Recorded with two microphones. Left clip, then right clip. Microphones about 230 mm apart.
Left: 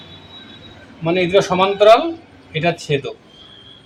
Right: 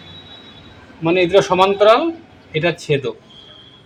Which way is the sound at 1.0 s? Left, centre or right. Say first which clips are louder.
Right 2 dB; right.